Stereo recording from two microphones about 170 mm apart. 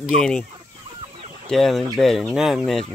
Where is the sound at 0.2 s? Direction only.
5° left (ahead or behind).